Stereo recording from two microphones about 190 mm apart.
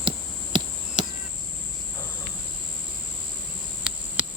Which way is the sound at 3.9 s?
5° right (ahead or behind).